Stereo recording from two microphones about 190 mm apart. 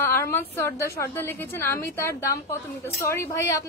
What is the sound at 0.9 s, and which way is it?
A woman's voice, 15° left (ahead or behind).